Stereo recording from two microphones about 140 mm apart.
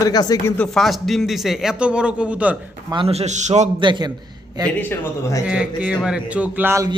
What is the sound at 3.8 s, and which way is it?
Speech, 30° right (ahead or behind).